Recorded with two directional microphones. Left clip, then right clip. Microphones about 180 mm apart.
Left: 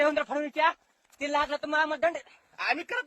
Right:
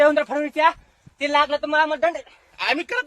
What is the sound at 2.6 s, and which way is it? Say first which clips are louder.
Speech: right 7 dB; centre (ahead or behind).